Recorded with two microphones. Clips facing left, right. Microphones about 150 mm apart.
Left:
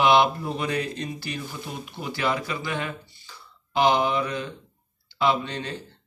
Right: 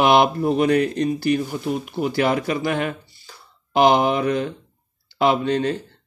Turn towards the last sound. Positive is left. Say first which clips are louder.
# right 6 dB
turn(degrees=-45)  # may be behind; listen again after turning